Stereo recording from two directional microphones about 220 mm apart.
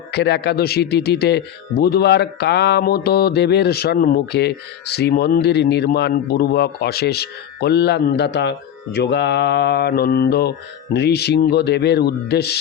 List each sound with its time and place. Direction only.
0.1 s a man's voice: 50° left (ahead or behind)